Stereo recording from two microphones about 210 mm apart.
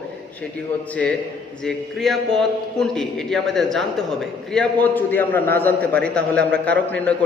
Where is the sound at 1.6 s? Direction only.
Centre (ahead or behind).